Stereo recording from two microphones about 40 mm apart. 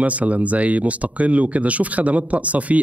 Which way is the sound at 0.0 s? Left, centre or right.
Right.